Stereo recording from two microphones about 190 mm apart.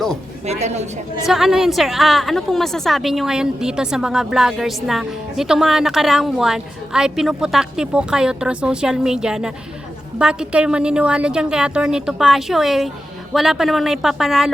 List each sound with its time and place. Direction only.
0.4 s a woman's voice: 35° right (ahead or behind)
1.3 s a woman's voice: centre (ahead or behind)